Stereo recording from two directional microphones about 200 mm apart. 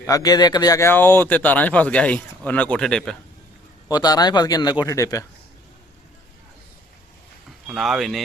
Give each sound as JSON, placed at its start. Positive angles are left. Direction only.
{"t": 0.0, "sound": "speech", "side_deg": 15}
{"t": 3.8, "sound": "speech", "side_deg": 20}
{"t": 7.7, "sound": "speech", "side_deg": 0}